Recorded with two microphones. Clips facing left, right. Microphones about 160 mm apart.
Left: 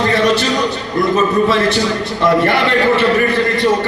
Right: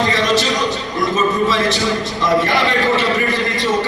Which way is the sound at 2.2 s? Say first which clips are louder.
Left 3 dB; 60° left (ahead or behind).